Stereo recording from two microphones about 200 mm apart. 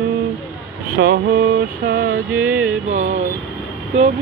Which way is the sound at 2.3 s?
10° right (ahead or behind).